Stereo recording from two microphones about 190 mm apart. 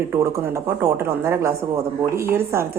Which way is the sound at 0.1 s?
10° right (ahead or behind).